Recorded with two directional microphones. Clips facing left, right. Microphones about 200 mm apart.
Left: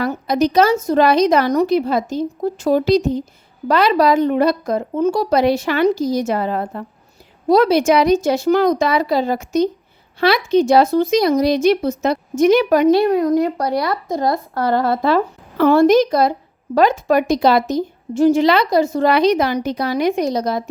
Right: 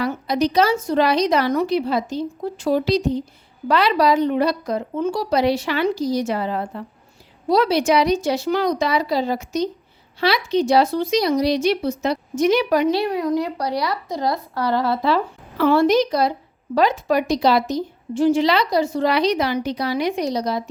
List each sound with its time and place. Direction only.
0.0 s a woman's voice: 45° left (ahead or behind)